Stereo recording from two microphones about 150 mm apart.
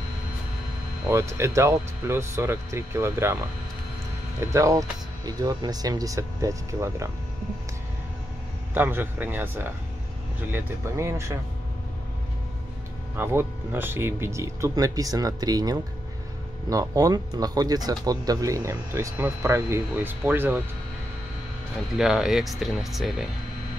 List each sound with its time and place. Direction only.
1.1 s speech: 20° right (ahead or behind)
4.5 s speech: 20° right (ahead or behind)
8.7 s speech: 15° right (ahead or behind)
13.1 s speech: 15° right (ahead or behind)
21.9 s speech: 5° right (ahead or behind)